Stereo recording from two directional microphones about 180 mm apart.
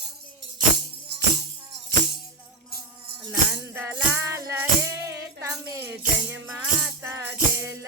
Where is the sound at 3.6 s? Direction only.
10° right (ahead or behind).